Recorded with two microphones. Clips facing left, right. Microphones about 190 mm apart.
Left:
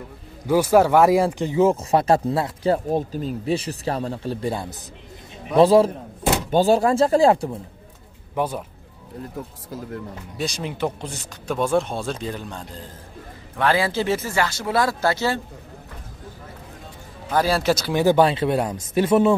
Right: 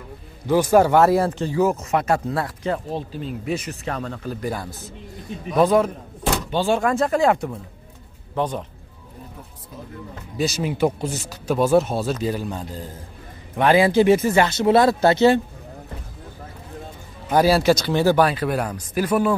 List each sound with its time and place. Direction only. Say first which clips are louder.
0.5 s speech: even; 5° left (ahead or behind); by 2.8 s 30° left (ahead or behind)
2.9 s speech: left 5 dB; 45° left (ahead or behind)
8.4 s speech: even; 5° left (ahead or behind)
10.3 s speech: right 5 dB; 5° right (ahead or behind)
13.6 s speech: right 5 dB; 15° right (ahead or behind)
17.3 s speech: right 4 dB; 10° right (ahead or behind)
17.7 s speech: right 1 dB; 5° left (ahead or behind)
18.0 s speech: left 2 dB; 25° left (ahead or behind)